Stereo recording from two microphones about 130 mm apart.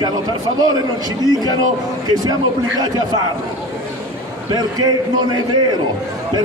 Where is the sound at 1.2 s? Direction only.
30° right (ahead or behind).